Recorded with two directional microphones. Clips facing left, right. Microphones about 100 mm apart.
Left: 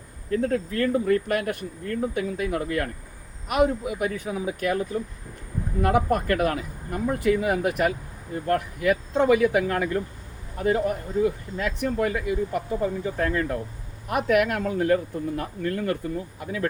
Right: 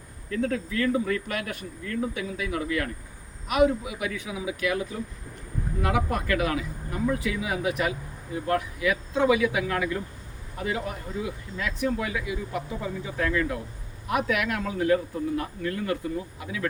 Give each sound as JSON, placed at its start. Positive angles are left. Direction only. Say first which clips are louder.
{"t": 0.3, "sound": "speech", "louder": "left 3 dB", "side_deg": 40}